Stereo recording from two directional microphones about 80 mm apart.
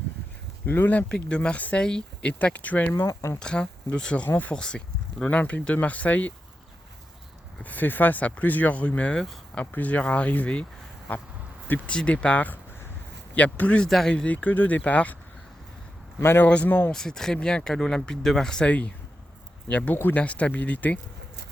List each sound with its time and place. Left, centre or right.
0.6 s speech: left
3.0 s speech: left
3.3 s speech: centre
7.6 s speech: left
11.7 s speech: centre
14.3 s speech: left
16.2 s speech: left
16.5 s speech: centre
16.9 s speech: centre